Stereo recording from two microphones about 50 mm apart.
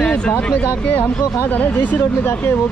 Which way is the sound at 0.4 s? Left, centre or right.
Left.